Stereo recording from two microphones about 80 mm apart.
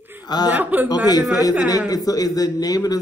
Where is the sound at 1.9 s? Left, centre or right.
Left.